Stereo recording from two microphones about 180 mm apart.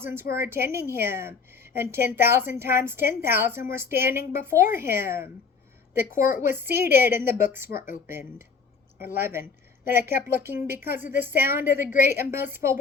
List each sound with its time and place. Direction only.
0.0 s a woman's voice: 15° right (ahead or behind)
6.4 s a woman's voice: 10° right (ahead or behind)
7.7 s speech: 55° left (ahead or behind)
8.0 s a woman's voice: 10° right (ahead or behind)